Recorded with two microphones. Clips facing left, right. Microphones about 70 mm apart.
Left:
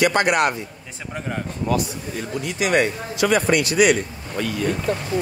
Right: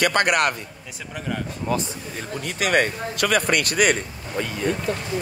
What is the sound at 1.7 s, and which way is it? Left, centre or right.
Speech, right.